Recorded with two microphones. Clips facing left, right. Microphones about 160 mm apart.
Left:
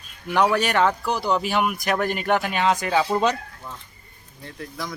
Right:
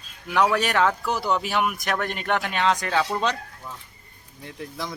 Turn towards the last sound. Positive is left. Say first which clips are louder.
# even
turn(degrees=-25)  # may be behind; listen again after turning